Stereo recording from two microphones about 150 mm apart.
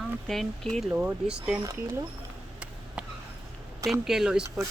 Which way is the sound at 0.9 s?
10° right (ahead or behind).